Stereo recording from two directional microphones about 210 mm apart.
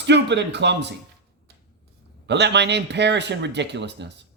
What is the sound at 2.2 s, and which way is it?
Speech, 55° right (ahead or behind).